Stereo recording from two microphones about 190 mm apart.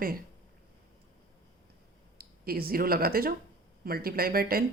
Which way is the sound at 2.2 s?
50° right (ahead or behind).